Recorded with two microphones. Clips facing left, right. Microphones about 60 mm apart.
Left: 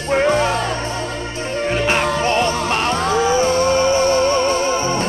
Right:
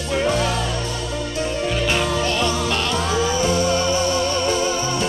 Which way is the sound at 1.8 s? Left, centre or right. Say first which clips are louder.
Left 4 dB; left.